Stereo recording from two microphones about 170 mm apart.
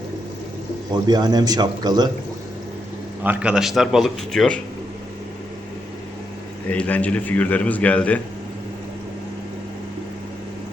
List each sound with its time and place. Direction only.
0.9 s a man's voice: 25° right (ahead or behind)
3.2 s a man's voice: 10° right (ahead or behind)
6.7 s a man's voice: 10° left (ahead or behind)